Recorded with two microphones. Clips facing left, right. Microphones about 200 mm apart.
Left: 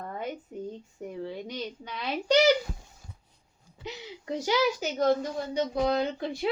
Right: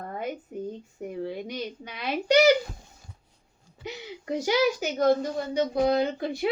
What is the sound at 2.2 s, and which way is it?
Speech, 10° right (ahead or behind).